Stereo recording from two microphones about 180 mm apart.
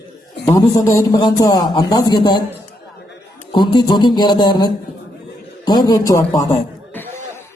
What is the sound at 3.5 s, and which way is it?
A man's voice, 25° left (ahead or behind).